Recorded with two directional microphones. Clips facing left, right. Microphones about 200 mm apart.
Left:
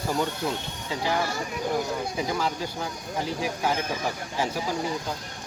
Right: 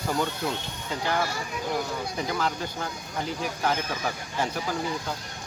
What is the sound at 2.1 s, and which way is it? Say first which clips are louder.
Speech: right 1 dB; 5° left (ahead or behind).